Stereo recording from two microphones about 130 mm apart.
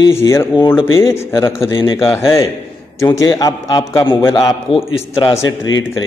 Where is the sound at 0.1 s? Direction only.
20° left (ahead or behind).